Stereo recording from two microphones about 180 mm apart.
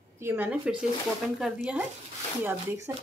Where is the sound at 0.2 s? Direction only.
10° right (ahead or behind).